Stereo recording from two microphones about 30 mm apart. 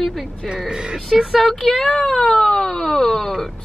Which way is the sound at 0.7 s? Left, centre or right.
Right.